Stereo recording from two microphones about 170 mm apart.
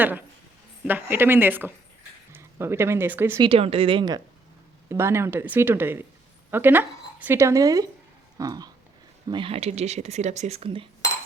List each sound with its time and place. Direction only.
0.0 s a woman's voice: 10° right (ahead or behind)
3.4 s speech: 35° right (ahead or behind)
4.9 s a woman's voice: 15° right (ahead or behind); by 10.8 s 35° right (ahead or behind)